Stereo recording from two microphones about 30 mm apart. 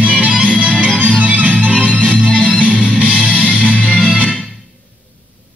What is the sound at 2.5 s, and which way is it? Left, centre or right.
Music, right.